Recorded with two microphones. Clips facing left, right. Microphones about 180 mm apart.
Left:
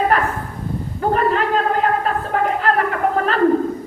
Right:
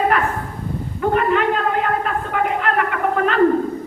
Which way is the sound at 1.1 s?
35° left (ahead or behind).